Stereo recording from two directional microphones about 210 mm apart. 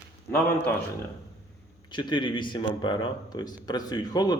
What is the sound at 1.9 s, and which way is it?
A man's voice, 20° left (ahead or behind).